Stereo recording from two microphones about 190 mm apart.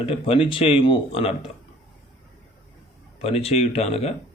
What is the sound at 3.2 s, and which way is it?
Speech, 30° left (ahead or behind).